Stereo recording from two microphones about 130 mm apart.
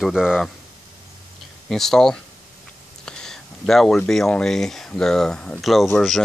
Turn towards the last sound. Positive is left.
turn(degrees=0)  # may be behind; listen again after turning